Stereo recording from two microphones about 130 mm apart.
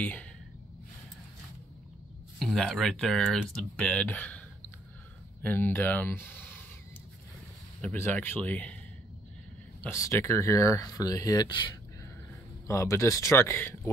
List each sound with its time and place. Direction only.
0.0 s speech: 10° left (ahead or behind)
2.3 s speech: centre (ahead or behind)
5.4 s speech: 15° left (ahead or behind)
7.8 s speech: 15° left (ahead or behind)
9.8 s speech: 20° left (ahead or behind)
12.6 s speech: 20° left (ahead or behind)